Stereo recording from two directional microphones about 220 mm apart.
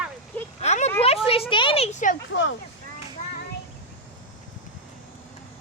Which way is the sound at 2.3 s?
60° left (ahead or behind).